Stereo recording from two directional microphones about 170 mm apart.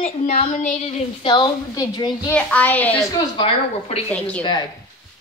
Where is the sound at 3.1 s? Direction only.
30° left (ahead or behind).